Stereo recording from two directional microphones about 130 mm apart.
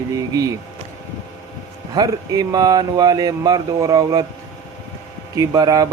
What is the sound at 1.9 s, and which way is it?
Speech, 30° right (ahead or behind).